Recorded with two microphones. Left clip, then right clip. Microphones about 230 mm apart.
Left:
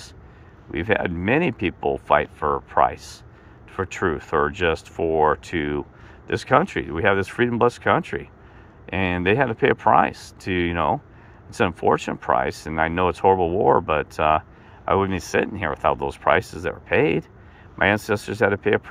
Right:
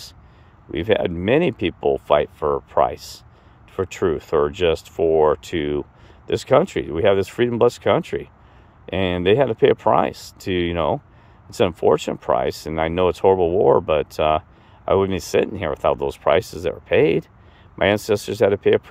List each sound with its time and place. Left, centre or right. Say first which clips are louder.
0.7 s speech: right 3 dB; right